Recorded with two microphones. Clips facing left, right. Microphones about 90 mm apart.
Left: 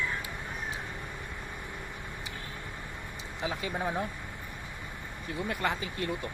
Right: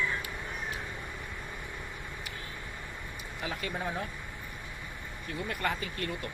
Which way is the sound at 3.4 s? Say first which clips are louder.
Left 3 dB; 15° left (ahead or behind).